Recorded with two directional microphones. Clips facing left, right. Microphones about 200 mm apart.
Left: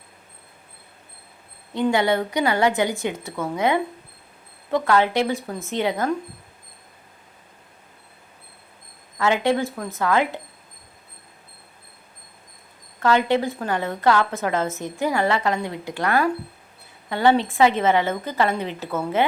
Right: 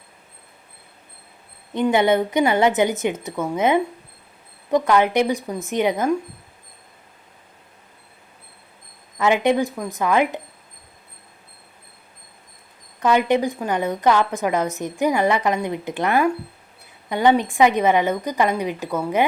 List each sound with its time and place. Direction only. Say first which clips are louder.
1.7 s a woman's voice: right 3 dB; 20° right (ahead or behind)
9.1 s a woman's voice: right 2 dB; 20° right (ahead or behind)
13.0 s a woman's voice: right 2 dB; 15° right (ahead or behind)